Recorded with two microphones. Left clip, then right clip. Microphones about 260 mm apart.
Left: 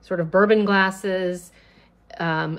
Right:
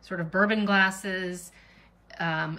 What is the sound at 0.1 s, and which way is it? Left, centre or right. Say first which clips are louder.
A woman's voice: left 8 dB; centre.